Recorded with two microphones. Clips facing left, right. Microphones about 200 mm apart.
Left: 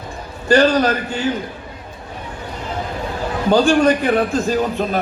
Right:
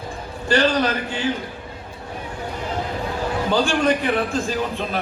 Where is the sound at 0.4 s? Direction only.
40° left (ahead or behind).